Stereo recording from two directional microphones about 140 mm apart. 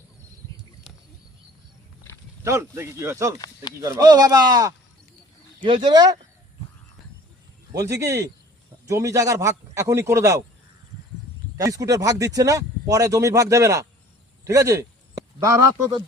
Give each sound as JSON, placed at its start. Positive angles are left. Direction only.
{"t": 2.4, "sound": "speech", "side_deg": -20}
{"t": 7.7, "sound": "speech", "side_deg": -20}
{"t": 11.5, "sound": "speech", "side_deg": -25}